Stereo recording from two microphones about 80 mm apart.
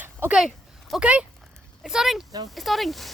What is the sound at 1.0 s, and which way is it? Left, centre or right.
Speech, centre.